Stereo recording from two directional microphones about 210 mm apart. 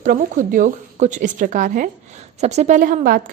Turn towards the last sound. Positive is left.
turn(degrees=-40)  # may be behind; listen again after turning